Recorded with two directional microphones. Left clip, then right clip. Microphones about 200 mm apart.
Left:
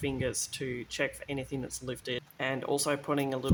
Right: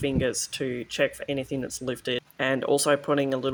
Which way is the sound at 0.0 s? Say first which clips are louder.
Right 7 dB; 15° right (ahead or behind).